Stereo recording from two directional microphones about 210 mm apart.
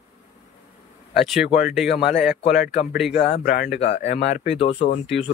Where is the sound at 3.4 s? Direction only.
40° left (ahead or behind).